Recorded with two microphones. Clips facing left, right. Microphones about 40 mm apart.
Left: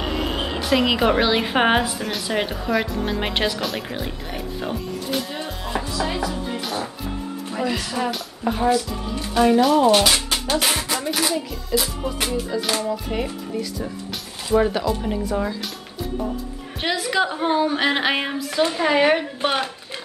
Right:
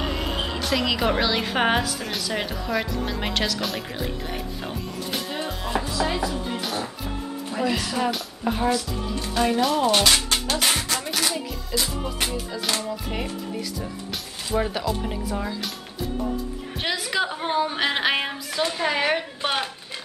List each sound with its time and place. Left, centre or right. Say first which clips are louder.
0.0 s music: left 2 dB; centre
0.6 s a woman's voice: left 6 dB; centre
2.0 s speech: left 3 dB; centre
2.2 s a woman's voice: left 5 dB; centre
2.5 s speech: left 3 dB; centre
3.3 s speech: left 1 dB; left
3.6 s music: left 2 dB; centre
7.5 s speech: even; centre
16.8 s speech: left 4 dB; centre